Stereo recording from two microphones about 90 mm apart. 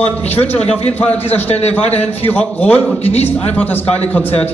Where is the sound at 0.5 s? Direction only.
15° left (ahead or behind).